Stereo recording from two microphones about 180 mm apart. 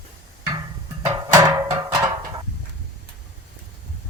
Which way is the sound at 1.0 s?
20° right (ahead or behind).